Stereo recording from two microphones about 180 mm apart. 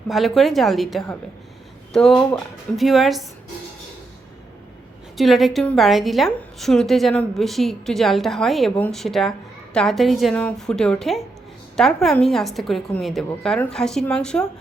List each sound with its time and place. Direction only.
0.1 s a woman's voice: centre (ahead or behind)
5.1 s a woman's voice: centre (ahead or behind)